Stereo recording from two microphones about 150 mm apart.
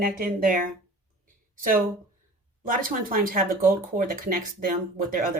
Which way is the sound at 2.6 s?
65° right (ahead or behind).